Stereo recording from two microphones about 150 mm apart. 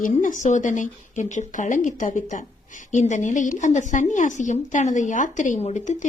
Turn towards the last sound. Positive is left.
turn(degrees=55)  # may be behind; listen again after turning